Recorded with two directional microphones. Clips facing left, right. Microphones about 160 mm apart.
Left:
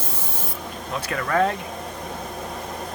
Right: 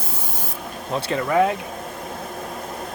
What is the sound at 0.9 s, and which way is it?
Speech, 25° right (ahead or behind).